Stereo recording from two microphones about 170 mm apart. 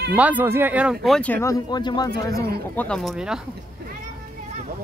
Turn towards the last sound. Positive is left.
turn(degrees=0)  # may be behind; listen again after turning